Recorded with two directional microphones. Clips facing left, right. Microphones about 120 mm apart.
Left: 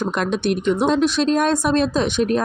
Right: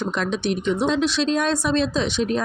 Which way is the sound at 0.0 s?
55° left (ahead or behind).